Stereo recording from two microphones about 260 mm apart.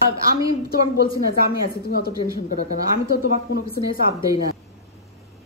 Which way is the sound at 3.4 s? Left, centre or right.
Left.